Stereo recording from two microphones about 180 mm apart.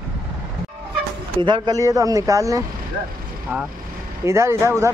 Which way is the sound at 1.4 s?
25° right (ahead or behind).